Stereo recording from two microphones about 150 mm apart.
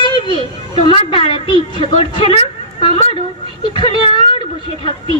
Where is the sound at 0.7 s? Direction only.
35° left (ahead or behind).